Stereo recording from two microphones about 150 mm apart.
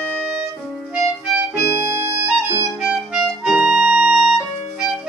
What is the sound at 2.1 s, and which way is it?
Music, 15° right (ahead or behind).